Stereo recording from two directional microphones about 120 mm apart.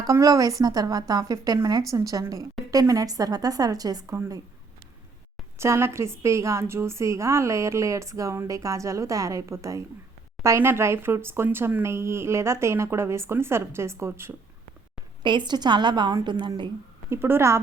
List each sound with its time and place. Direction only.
0.0 s a woman's voice: 30° right (ahead or behind)
5.5 s a woman's voice: 25° right (ahead or behind)
15.2 s a woman's voice: 40° right (ahead or behind)
17.1 s a woman's voice: 20° right (ahead or behind)